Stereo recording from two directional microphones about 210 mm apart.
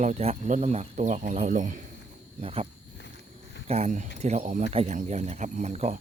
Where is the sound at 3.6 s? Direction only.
30° right (ahead or behind).